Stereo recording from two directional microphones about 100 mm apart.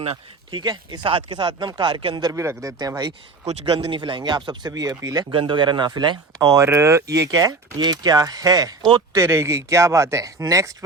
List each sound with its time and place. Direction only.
0.5 s speech: 45° right (ahead or behind)
2.3 s speech: 30° right (ahead or behind)
3.4 s speech: 85° right; by 5.2 s 40° right (ahead or behind)
5.3 s speech: 55° right (ahead or behind); by 10.7 s 35° right (ahead or behind)